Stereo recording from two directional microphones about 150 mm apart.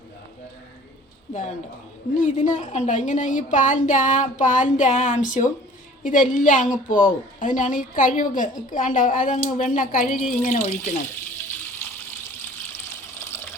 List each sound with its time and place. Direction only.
2.1 s a woman's voice: 55° left (ahead or behind)
13.1 s water: 15° left (ahead or behind)